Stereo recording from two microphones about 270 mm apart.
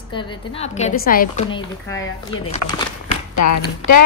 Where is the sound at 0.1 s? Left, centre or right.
Left.